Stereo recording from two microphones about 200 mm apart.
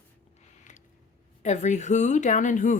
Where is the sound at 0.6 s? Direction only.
40° left (ahead or behind).